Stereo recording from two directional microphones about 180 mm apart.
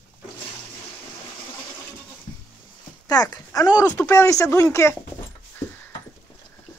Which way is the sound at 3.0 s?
20° left (ahead or behind).